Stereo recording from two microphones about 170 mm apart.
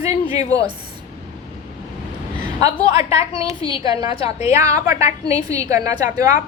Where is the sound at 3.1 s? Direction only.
35° left (ahead or behind).